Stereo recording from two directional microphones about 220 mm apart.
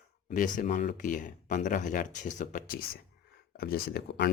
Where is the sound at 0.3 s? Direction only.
35° left (ahead or behind).